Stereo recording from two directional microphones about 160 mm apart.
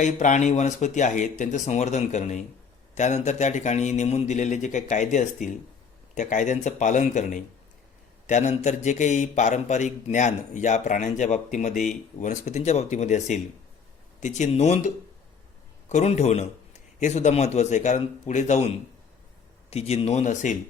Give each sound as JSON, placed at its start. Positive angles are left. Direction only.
{"t": 0.0, "sound": "a man's voice", "side_deg": 50}
{"t": 19.7, "sound": "a man's voice", "side_deg": 40}